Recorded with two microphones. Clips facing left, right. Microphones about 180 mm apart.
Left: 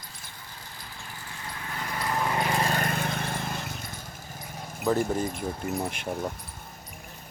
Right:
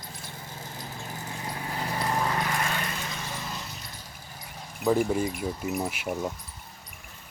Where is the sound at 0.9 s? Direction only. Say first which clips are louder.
Right 4 dB; 40° right (ahead or behind).